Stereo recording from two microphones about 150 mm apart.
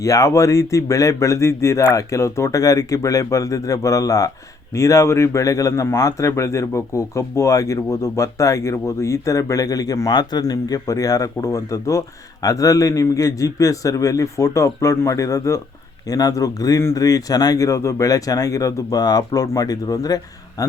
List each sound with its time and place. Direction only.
0.0 s speech: 20° left (ahead or behind)